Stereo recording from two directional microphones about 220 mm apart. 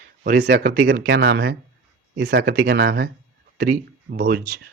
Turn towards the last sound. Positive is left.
turn(degrees=-40)  # may be behind; listen again after turning